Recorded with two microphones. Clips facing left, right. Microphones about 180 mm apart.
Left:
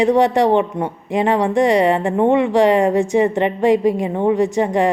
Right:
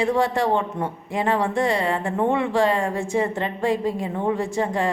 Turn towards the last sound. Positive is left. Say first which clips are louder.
# left 7 dB
turn(degrees=20)  # may be behind; listen again after turning